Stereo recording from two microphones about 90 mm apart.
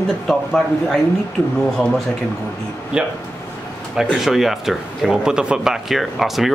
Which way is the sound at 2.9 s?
10° right (ahead or behind).